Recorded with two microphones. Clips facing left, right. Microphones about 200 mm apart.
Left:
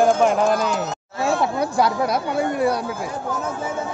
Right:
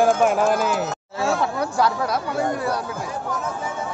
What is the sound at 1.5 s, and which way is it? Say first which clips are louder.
Speech: left 2 dB; 15° left (ahead or behind).